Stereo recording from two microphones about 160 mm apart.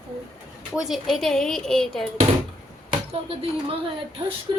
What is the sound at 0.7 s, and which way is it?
A woman's voice, centre (ahead or behind).